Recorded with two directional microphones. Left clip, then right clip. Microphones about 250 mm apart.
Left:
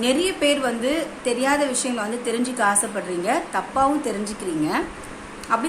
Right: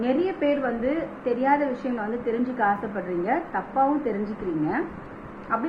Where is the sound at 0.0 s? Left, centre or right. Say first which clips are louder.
Left 4 dB; left.